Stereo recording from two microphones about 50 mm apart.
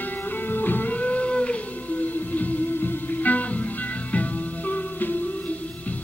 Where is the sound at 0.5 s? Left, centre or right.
Left.